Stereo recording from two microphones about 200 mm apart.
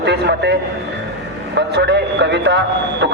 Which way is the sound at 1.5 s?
60° right (ahead or behind).